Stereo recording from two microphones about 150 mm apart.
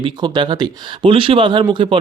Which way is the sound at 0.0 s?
30° right (ahead or behind).